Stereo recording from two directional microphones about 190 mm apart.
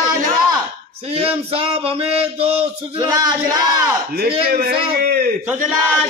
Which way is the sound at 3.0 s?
20° right (ahead or behind).